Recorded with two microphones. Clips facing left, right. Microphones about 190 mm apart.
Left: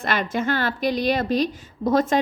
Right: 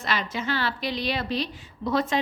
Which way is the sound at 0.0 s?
50° left (ahead or behind).